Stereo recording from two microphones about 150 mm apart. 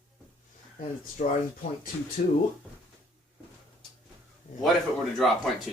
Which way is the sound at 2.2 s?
50° left (ahead or behind).